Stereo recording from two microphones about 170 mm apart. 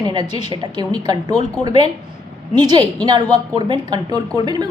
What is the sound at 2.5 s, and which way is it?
A woman's voice, 25° right (ahead or behind).